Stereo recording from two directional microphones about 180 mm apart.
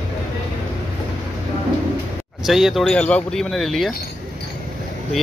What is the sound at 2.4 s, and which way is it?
Speech, centre (ahead or behind).